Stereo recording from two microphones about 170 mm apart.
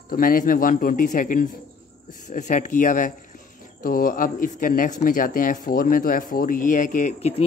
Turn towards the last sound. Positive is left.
turn(degrees=40)  # may be behind; listen again after turning